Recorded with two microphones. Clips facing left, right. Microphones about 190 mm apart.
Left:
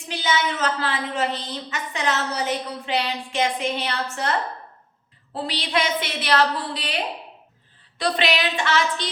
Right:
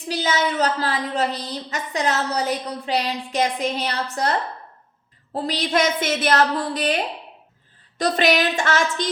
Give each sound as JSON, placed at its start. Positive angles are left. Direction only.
{"t": 0.1, "sound": "a woman's voice", "side_deg": -40}